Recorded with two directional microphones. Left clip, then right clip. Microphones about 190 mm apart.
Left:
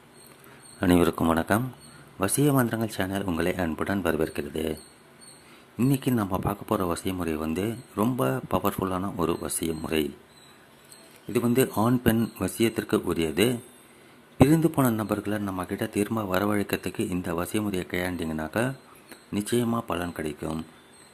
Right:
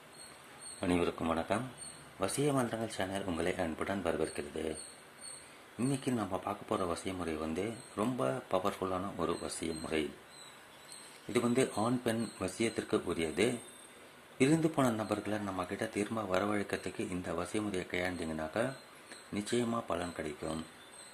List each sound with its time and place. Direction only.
0.8 s a man's voice: 30° left (ahead or behind)
5.9 s a man's voice: 25° left (ahead or behind)
11.3 s a man's voice: 20° left (ahead or behind)